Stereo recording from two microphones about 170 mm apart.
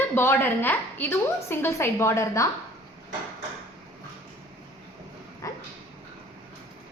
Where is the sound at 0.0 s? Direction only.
10° left (ahead or behind).